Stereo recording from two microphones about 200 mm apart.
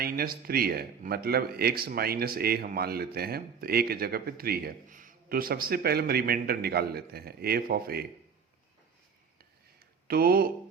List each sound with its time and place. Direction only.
0.0 s speech: 50° right (ahead or behind)
10.1 s speech: 50° right (ahead or behind)